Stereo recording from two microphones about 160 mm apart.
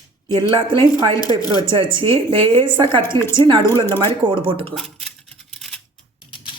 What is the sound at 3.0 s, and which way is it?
Speech, 15° left (ahead or behind).